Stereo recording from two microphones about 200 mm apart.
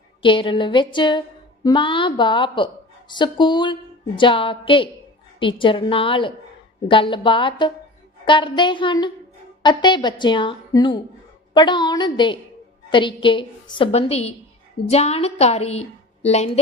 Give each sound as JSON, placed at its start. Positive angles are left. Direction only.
{"t": 0.2, "sound": "a woman's voice", "side_deg": 25}